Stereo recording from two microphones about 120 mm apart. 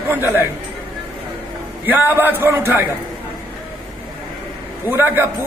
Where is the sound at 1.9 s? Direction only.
15° right (ahead or behind).